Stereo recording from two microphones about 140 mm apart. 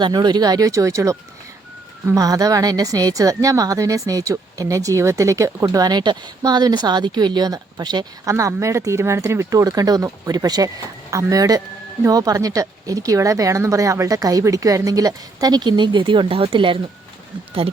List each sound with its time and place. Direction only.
0.0 s a woman's voice: 30° right (ahead or behind)